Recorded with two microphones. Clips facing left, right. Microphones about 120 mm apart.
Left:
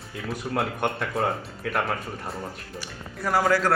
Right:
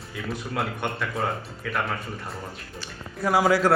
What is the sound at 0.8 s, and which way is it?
Speech, 50° left (ahead or behind).